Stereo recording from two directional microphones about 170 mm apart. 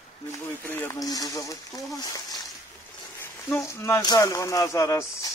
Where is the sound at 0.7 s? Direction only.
15° left (ahead or behind).